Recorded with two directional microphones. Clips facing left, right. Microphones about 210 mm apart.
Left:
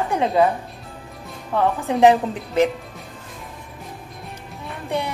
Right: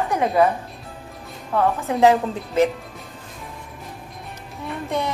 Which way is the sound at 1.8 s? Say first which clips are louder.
Left 2 dB; 15° left (ahead or behind).